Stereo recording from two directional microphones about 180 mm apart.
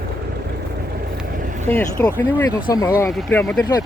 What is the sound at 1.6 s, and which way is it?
Speech, 15° left (ahead or behind).